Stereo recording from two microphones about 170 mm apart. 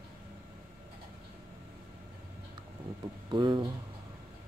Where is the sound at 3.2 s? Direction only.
25° right (ahead or behind).